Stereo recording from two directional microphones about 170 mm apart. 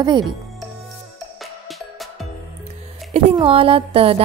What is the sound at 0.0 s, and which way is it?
Speech, 25° right (ahead or behind).